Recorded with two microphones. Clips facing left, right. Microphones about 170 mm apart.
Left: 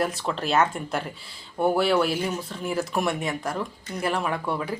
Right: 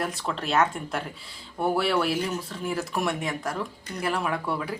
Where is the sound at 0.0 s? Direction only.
Centre (ahead or behind).